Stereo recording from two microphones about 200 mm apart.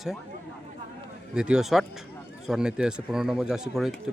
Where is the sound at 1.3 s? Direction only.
5° right (ahead or behind).